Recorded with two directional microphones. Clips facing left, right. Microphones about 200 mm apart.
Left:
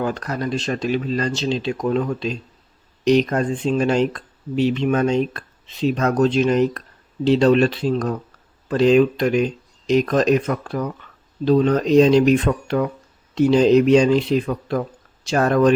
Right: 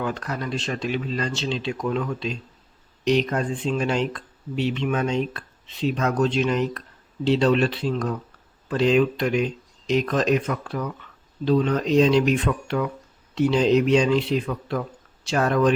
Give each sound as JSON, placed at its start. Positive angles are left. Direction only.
{"t": 0.0, "sound": "speech", "side_deg": 40}